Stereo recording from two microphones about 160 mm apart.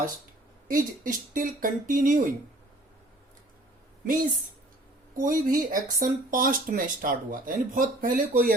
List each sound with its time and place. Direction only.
0.7 s speech: 60° right (ahead or behind)
4.0 s speech: 60° right (ahead or behind)